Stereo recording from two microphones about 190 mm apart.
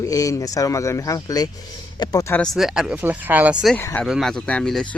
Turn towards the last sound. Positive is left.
turn(degrees=0)  # may be behind; listen again after turning